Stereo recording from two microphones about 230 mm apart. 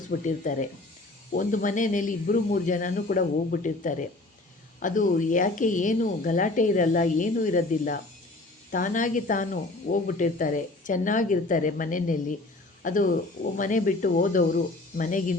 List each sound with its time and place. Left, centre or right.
0.1 s speech: left